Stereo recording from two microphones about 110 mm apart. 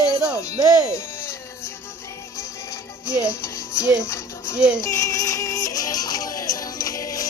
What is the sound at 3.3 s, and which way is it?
Music, 25° left (ahead or behind).